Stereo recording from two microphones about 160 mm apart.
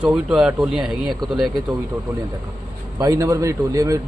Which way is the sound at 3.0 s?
20° right (ahead or behind).